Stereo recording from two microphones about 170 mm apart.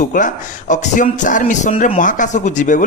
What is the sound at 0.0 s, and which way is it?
Speech, 50° left (ahead or behind).